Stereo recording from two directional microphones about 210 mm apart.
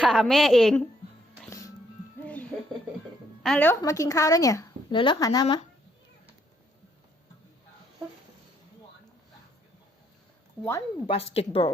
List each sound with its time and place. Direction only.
0.0 s a woman's voice: centre (ahead or behind)
1.5 s music: 15° left (ahead or behind)
3.4 s a woman's voice: 5° left (ahead or behind)
3.8 s a woman's voice: 15° left (ahead or behind)
10.7 s a woman's voice: 15° left (ahead or behind)
11.1 s speech: 25° left (ahead or behind)